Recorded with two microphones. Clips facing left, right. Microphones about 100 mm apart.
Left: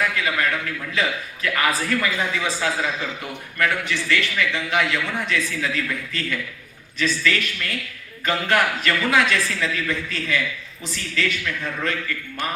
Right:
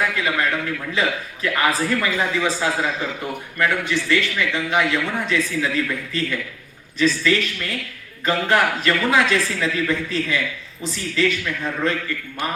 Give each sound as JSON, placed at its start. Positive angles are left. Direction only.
{"t": 0.0, "sound": "a man's voice", "side_deg": -25}
{"t": 4.1, "sound": "a man's voice", "side_deg": -25}